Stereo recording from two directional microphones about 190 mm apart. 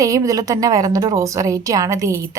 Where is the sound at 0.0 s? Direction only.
15° right (ahead or behind).